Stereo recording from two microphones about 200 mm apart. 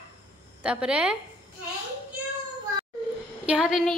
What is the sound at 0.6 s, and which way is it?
Speech, 5° right (ahead or behind).